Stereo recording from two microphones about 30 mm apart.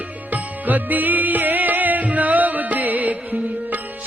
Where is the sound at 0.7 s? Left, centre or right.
Right.